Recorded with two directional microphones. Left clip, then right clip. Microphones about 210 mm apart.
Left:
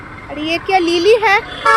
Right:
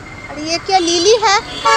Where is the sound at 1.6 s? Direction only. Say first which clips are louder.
Left 1 dB; 60° left (ahead or behind).